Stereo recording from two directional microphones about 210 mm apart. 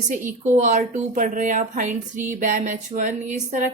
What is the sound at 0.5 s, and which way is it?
Speech, 35° right (ahead or behind).